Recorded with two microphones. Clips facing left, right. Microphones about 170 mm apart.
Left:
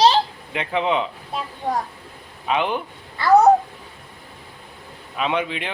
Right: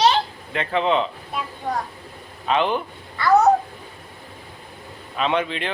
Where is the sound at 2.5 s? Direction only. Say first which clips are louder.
Right 1 dB; 10° left (ahead or behind).